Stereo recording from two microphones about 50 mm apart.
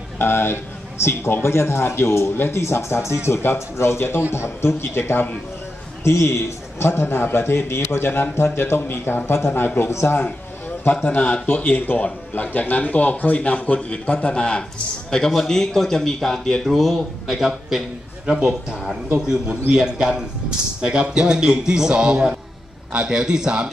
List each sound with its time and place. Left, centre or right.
0.2 s a man's voice: left
2.6 s a man's voice: left
6.0 s a man's voice: left
10.9 s a man's voice: left; by 23.7 s centre